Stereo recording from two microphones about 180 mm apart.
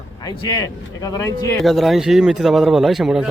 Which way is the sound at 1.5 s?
Centre (ahead or behind).